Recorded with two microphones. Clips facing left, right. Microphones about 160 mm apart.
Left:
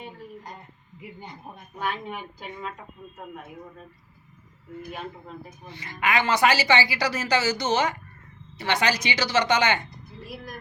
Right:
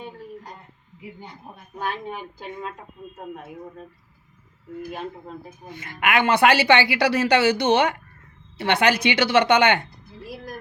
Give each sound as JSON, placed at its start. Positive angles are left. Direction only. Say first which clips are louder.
{"t": 1.8, "sound": "a woman's voice", "louder": "right 1 dB", "side_deg": -35}
{"t": 4.9, "sound": "a woman's voice", "louder": "right 3 dB", "side_deg": -35}
{"t": 5.6, "sound": "a woman's voice", "louder": "right 2 dB", "side_deg": -50}